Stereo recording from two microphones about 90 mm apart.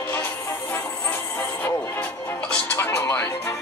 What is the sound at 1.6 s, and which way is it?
Music, 20° left (ahead or behind).